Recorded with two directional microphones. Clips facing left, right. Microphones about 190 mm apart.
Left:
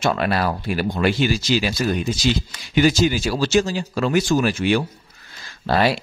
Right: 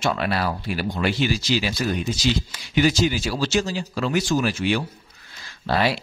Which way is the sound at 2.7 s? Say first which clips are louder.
Left 3 dB; 50° left (ahead or behind).